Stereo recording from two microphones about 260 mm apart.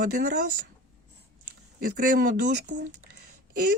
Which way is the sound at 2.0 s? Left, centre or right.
Right.